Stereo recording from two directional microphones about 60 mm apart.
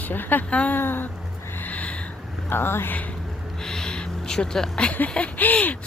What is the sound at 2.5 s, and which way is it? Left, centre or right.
Speech, left.